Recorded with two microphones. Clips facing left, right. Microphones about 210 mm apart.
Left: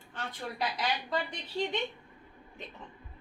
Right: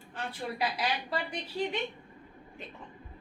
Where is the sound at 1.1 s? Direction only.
10° right (ahead or behind).